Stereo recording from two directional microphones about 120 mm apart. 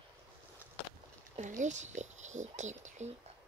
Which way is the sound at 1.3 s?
90° right.